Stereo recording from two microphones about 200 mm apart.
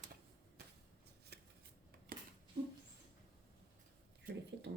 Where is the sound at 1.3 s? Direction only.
55° right (ahead or behind).